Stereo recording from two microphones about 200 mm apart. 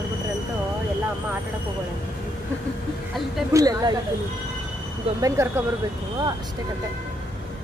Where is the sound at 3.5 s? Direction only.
20° right (ahead or behind).